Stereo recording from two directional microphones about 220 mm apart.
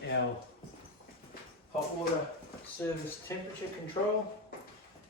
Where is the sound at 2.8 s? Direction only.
10° left (ahead or behind).